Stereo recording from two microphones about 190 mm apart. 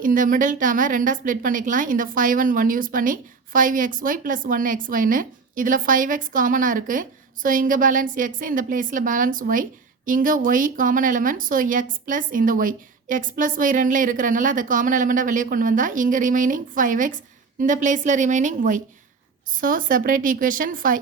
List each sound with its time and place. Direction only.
0.0 s a woman's voice: 45° right (ahead or behind)